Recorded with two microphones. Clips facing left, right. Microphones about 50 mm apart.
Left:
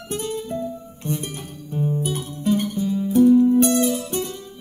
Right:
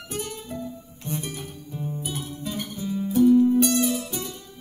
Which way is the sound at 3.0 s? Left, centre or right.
Left.